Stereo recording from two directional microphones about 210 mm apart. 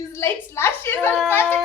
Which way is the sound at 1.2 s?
10° left (ahead or behind).